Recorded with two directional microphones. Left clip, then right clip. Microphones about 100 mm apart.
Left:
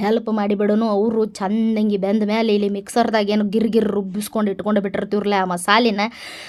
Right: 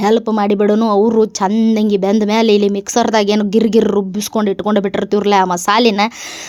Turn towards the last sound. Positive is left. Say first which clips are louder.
# right 4 dB
turn(degrees=-50)  # may be behind; listen again after turning